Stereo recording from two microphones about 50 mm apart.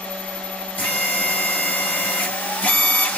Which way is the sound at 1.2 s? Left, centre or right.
Left.